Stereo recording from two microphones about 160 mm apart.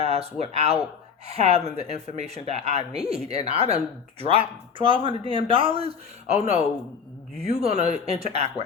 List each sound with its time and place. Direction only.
0.0 s speech: 40° right (ahead or behind)